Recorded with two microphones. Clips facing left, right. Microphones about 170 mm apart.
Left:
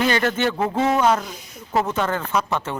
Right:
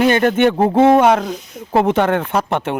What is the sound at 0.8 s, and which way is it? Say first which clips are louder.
Speech: right 8 dB; 55° right (ahead or behind).